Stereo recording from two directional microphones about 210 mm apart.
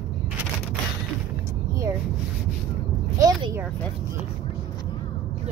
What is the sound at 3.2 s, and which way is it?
Speech, 15° right (ahead or behind).